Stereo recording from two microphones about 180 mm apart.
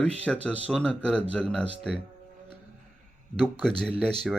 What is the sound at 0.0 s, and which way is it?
Speech, 5° left (ahead or behind).